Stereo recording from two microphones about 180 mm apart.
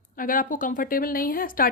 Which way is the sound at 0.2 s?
50° left (ahead or behind).